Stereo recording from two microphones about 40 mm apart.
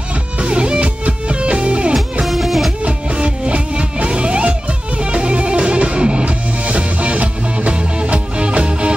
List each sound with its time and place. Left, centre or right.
0.4 s music: right
2.2 s music: centre
2.8 s music: right